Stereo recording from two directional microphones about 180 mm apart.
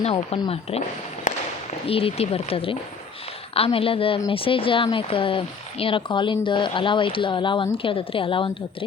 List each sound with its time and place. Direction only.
0.0 s speech: 35° left (ahead or behind)
1.3 s a sound: 45° left (ahead or behind)
1.9 s speech: 30° left (ahead or behind)